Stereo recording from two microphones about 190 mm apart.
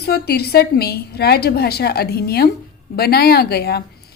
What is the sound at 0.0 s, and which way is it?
A woman's voice, 55° left (ahead or behind).